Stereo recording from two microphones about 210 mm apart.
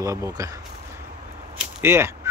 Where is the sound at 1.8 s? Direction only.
10° right (ahead or behind).